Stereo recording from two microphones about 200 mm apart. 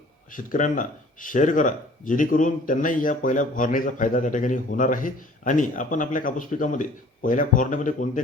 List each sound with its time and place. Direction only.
0.3 s speech: 40° left (ahead or behind)